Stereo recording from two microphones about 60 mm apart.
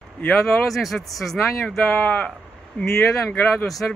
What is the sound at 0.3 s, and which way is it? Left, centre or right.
Speech, centre.